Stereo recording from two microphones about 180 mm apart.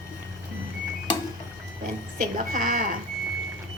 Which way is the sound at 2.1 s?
50° right (ahead or behind).